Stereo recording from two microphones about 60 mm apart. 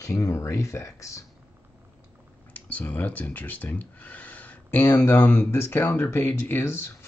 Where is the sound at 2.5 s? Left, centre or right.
Left.